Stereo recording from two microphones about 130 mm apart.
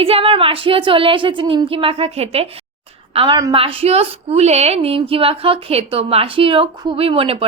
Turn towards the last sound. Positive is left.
turn(degrees=-45)  # may be behind; listen again after turning